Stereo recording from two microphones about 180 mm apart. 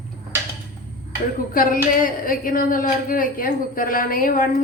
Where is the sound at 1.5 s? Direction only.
50° left (ahead or behind).